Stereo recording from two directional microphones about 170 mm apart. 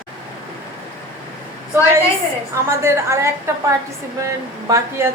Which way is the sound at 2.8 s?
15° right (ahead or behind).